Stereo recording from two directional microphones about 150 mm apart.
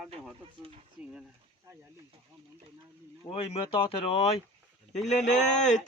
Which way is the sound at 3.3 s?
40° left (ahead or behind).